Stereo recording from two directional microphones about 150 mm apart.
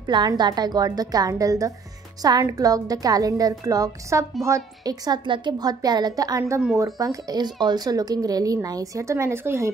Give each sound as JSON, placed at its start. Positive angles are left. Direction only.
{"t": 0.0, "sound": "speech", "side_deg": -25}